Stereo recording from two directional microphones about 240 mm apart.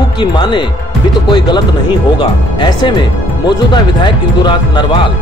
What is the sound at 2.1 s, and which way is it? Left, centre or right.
Speech, centre.